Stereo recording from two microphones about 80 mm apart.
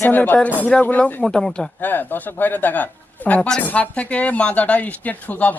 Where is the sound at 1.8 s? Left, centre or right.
Left.